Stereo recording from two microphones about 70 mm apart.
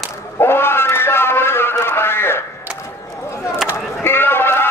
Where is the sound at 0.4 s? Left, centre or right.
Left.